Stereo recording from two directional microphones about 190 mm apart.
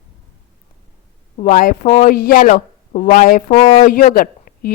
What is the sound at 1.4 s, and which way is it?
Speech, 45° left (ahead or behind).